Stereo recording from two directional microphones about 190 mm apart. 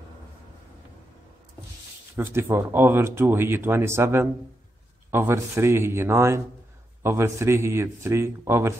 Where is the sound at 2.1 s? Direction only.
10° right (ahead or behind).